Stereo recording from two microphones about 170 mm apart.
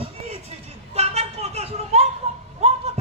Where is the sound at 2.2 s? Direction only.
40° right (ahead or behind).